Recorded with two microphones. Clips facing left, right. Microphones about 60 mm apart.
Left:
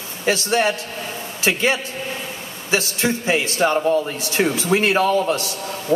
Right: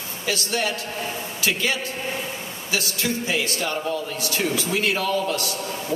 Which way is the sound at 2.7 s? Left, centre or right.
Left.